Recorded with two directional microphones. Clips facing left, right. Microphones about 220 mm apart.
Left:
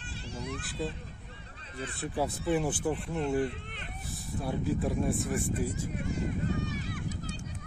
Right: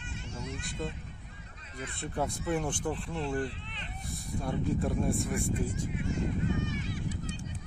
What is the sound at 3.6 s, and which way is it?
Vehicle, 50° left (ahead or behind).